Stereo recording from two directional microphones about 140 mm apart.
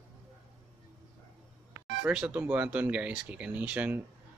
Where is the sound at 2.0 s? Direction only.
10° right (ahead or behind).